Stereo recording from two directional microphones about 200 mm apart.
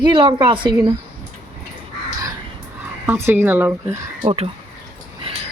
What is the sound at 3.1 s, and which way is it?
Speech, 10° right (ahead or behind).